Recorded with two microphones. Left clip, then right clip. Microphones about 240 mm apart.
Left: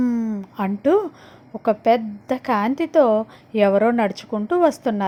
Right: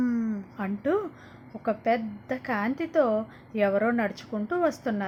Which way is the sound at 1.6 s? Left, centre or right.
Left.